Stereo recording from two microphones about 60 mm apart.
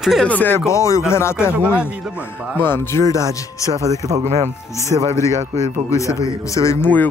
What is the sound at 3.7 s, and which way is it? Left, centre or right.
Speech, right.